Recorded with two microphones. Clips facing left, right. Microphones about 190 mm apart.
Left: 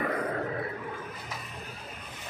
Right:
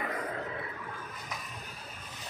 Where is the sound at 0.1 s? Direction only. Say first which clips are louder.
Left 6 dB; 45° left (ahead or behind).